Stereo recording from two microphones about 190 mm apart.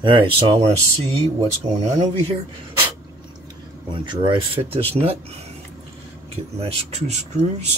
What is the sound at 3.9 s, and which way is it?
Speech, 25° right (ahead or behind).